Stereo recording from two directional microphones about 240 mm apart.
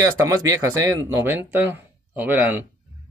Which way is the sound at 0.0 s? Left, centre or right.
Centre.